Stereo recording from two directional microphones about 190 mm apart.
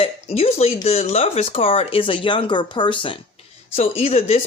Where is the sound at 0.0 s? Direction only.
30° left (ahead or behind).